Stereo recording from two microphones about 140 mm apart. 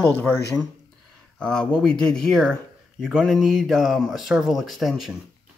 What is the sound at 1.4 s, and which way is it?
Speech, 5° left (ahead or behind).